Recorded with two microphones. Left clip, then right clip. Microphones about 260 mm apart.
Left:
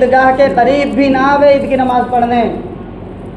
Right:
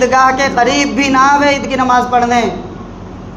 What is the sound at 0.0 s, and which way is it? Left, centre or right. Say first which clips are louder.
A man's voice: left 2 dB; right.